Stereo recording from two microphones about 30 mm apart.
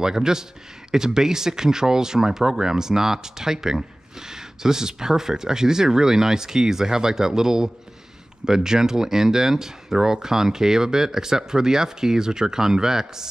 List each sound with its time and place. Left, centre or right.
0.0 s speech: centre